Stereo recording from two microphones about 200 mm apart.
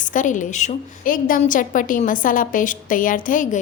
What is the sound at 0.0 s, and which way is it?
A woman's voice, 40° left (ahead or behind).